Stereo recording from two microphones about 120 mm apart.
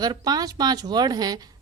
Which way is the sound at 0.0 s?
35° right (ahead or behind).